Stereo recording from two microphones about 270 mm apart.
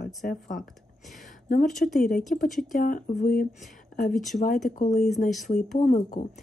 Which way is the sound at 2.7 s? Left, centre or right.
Left.